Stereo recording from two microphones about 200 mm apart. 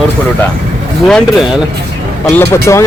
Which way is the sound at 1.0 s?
Centre (ahead or behind).